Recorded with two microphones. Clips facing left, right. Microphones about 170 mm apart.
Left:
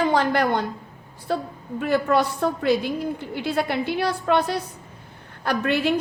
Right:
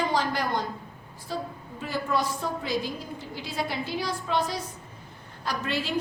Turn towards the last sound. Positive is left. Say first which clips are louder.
# left 8 dB
turn(degrees=60)  # may be behind; listen again after turning